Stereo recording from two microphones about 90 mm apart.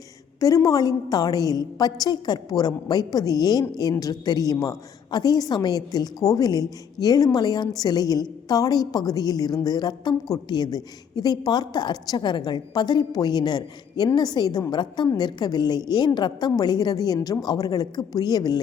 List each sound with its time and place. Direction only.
0.3 s a woman's voice: 40° left (ahead or behind)